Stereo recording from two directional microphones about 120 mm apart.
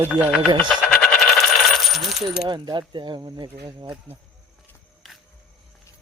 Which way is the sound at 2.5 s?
40° right (ahead or behind).